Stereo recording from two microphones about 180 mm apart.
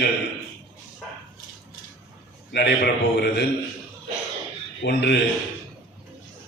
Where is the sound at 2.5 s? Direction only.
65° left (ahead or behind).